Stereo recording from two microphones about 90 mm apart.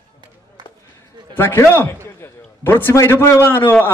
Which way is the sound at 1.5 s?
25° left (ahead or behind).